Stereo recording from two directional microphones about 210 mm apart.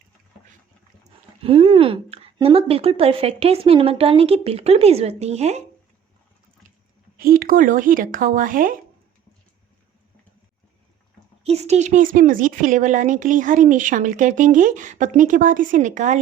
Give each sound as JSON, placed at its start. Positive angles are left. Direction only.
{"t": 1.4, "sound": "a woman's voice", "side_deg": -25}
{"t": 7.2, "sound": "speech", "side_deg": -45}
{"t": 11.4, "sound": "speech", "side_deg": -30}